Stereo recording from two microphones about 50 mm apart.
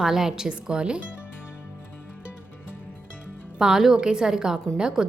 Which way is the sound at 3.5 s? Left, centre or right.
Centre.